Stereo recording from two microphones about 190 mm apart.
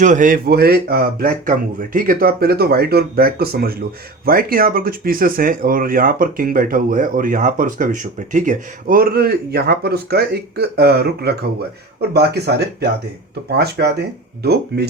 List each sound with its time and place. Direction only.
0.0 s speech: 40° right (ahead or behind); by 14.8 s 60° right (ahead or behind)